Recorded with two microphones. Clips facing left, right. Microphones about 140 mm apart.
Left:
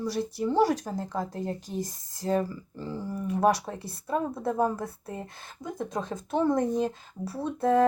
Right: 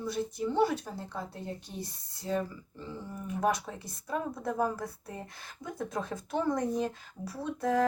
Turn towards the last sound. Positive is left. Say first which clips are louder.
# left 5 dB
turn(degrees=30)  # may be behind; listen again after turning